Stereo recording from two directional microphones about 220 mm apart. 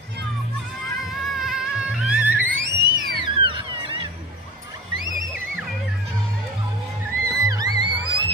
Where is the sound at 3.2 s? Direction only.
20° right (ahead or behind).